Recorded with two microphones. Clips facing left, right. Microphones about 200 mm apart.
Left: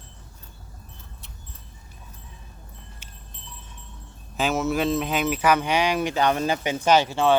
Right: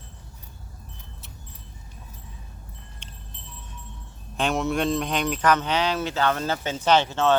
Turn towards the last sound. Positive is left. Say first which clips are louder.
# left 1 dB
turn(degrees=10)  # may be behind; listen again after turning